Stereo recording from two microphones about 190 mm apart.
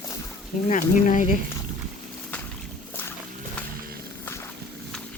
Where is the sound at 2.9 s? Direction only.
10° left (ahead or behind).